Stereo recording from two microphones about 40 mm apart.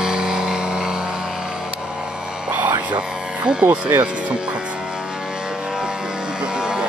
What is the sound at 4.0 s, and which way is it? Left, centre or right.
Music, right.